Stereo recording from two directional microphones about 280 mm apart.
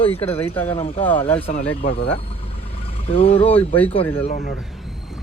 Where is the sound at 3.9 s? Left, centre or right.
Left.